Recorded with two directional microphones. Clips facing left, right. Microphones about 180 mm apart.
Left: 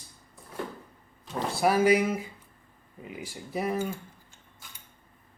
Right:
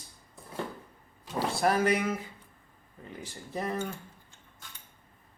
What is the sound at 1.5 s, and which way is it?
Speech, 5° left (ahead or behind).